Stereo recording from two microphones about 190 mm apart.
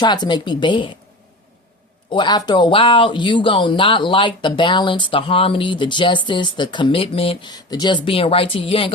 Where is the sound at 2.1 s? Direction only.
25° left (ahead or behind).